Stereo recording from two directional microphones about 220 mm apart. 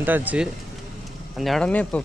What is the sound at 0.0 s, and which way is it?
Speech, 10° right (ahead or behind).